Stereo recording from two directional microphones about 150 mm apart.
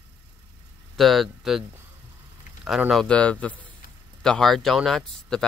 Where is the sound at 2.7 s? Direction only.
Centre (ahead or behind).